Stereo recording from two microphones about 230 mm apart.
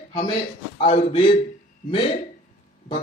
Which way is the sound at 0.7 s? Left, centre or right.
Left.